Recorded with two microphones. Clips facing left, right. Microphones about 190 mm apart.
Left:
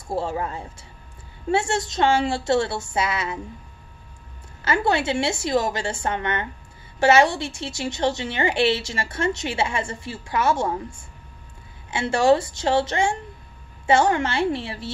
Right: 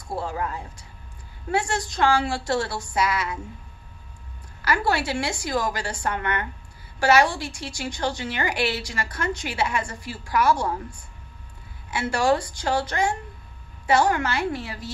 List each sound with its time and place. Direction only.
0.1 s a woman's voice: 25° left (ahead or behind)
4.6 s a woman's voice: 25° left (ahead or behind)